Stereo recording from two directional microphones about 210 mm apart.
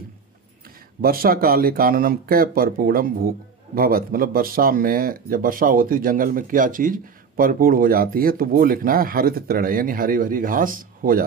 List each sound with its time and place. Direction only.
1.0 s speech: 45° right (ahead or behind)